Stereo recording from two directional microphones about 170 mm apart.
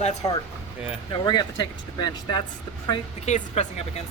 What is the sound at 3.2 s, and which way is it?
Speech, 45° left (ahead or behind).